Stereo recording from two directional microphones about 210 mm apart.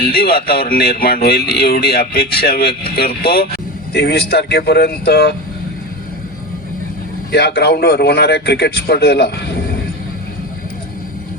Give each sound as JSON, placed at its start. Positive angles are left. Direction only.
{"t": 0.0, "sound": "speech", "side_deg": 50}
{"t": 7.3, "sound": "speech", "side_deg": 50}